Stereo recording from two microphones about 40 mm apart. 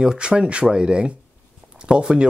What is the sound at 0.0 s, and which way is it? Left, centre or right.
Speech, right.